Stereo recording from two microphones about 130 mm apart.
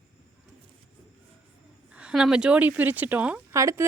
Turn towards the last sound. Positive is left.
turn(degrees=-25)  # may be behind; listen again after turning